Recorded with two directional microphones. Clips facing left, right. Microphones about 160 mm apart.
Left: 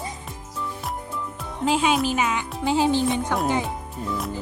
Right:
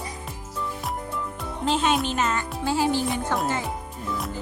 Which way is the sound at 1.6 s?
5° left (ahead or behind).